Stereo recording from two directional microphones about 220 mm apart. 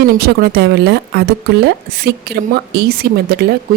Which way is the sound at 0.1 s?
45° right (ahead or behind).